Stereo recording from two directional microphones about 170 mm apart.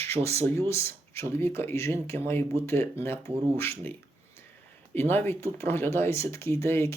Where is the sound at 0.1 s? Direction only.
35° right (ahead or behind).